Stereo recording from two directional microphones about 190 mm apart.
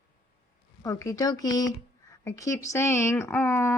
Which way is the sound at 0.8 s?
15° left (ahead or behind).